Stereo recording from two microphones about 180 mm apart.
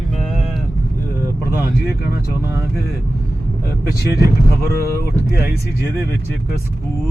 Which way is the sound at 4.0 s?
60° left (ahead or behind).